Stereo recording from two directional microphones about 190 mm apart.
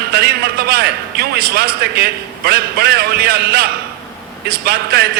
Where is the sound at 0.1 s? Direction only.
55° right (ahead or behind).